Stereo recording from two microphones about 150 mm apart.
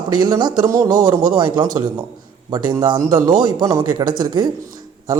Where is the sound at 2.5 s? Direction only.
25° right (ahead or behind).